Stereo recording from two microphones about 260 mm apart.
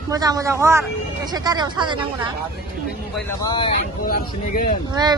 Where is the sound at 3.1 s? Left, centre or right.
Centre.